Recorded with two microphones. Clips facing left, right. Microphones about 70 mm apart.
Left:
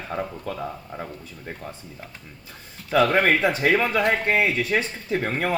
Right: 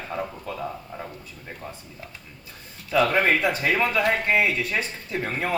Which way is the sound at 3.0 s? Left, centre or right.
Left.